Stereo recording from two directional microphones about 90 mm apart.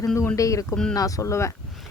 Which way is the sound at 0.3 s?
35° left (ahead or behind).